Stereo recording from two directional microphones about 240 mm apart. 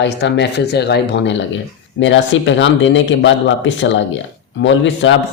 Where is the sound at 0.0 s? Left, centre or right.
Left.